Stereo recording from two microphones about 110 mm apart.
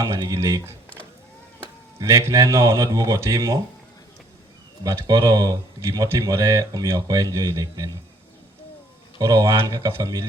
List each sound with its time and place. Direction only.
0.0 s speech: 30° right (ahead or behind)
2.0 s speech: 30° right (ahead or behind)
4.8 s speech: 35° right (ahead or behind)
9.1 s speech: 25° right (ahead or behind)